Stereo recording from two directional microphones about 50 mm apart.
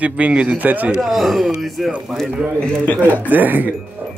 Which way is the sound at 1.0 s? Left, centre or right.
Centre.